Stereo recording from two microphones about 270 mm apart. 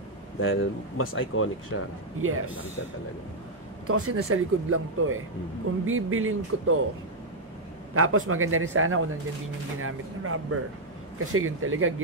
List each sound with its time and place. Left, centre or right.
0.4 s speech: left
2.1 s speech: right
3.8 s speech: right
7.9 s speech: right